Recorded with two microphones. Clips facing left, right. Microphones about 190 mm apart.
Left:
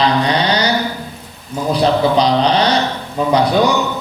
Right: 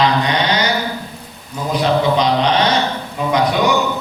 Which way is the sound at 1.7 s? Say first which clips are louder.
Left 2 dB; 35° left (ahead or behind).